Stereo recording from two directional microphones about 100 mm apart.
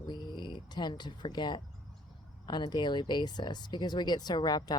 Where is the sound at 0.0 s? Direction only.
50° left (ahead or behind).